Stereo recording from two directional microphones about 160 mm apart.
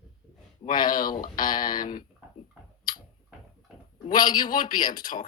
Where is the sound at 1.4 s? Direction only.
25° left (ahead or behind).